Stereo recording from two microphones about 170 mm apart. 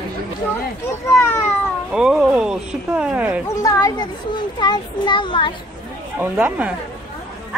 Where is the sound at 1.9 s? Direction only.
5° right (ahead or behind).